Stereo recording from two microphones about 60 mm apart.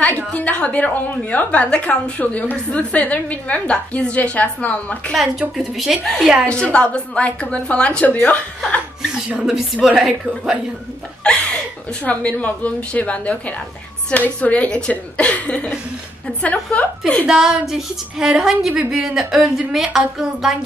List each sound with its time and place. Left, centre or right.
0.3 s a woman's voice: centre
5.1 s a woman's voice: centre
6.4 s a woman's voice: centre
9.4 s a woman's voice: centre
11.2 s speech: centre
12.0 s a woman's voice: left
17.3 s a woman's voice: centre